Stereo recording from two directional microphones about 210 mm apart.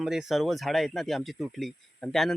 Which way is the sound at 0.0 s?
Centre (ahead or behind).